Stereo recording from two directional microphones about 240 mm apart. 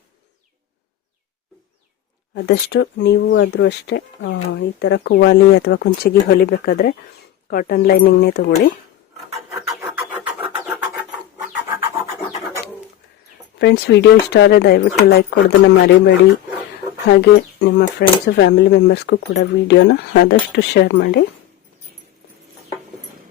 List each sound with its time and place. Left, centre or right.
2.3 s speech: left
9.3 s filing: centre
9.8 s vehicle: centre
13.6 s speech: left